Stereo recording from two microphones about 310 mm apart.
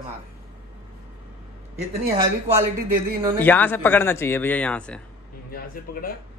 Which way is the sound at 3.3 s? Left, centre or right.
Centre.